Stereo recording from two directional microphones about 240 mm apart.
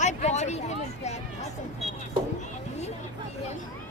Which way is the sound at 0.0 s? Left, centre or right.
Left.